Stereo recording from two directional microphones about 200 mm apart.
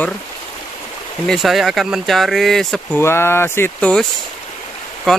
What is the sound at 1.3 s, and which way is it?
Speech, centre (ahead or behind).